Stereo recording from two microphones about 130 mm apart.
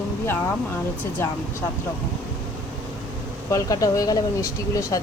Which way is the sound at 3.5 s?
25° left (ahead or behind).